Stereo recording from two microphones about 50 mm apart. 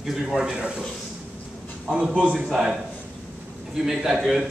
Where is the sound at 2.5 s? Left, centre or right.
Centre.